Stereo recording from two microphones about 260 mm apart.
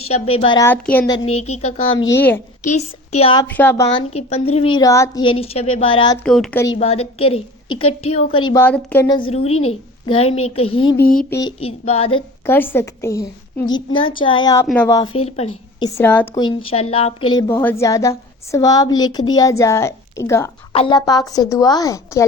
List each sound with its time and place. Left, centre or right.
0.0 s a woman's voice: left
2.6 s speech: left
3.4 s a woman's voice: centre
4.1 s a woman's voice: left
6.2 s speech: centre
6.7 s a woman's voice: left
11.0 s a sound: left
11.3 s a woman's voice: centre
12.5 s a woman's voice: centre
17.3 s a woman's voice: centre